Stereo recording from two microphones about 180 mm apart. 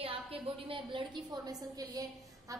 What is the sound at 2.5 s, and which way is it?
Music, 20° right (ahead or behind).